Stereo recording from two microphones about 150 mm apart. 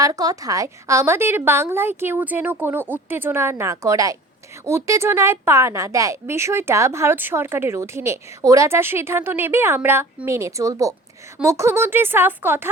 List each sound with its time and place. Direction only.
0.0 s a woman's voice: 25° right (ahead or behind)